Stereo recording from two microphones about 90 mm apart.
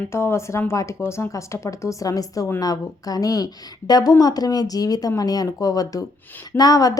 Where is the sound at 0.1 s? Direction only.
30° left (ahead or behind).